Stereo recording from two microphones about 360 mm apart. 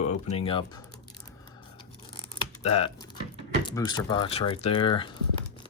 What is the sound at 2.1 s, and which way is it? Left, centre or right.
Typing, centre.